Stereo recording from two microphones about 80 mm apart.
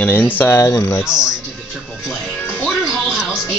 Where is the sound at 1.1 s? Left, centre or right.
Centre.